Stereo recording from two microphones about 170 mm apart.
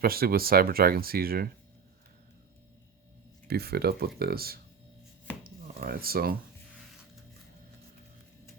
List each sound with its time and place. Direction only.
0.0 s speech: 60° right (ahead or behind)
3.4 s speech: 70° right (ahead or behind)
5.4 s a sound: 60° right (ahead or behind)